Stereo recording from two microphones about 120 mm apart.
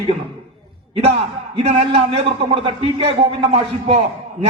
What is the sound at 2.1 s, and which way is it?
A man's voice, 45° right (ahead or behind).